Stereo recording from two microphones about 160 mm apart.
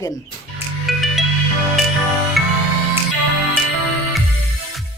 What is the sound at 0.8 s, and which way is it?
Music, centre (ahead or behind).